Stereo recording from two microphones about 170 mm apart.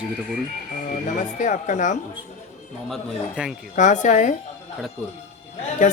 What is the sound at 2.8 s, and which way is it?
Speech, centre (ahead or behind).